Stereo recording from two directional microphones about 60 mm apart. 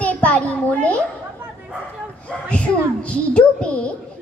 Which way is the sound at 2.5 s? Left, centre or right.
Left.